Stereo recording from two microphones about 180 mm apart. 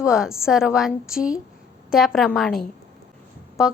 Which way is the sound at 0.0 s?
5° right (ahead or behind).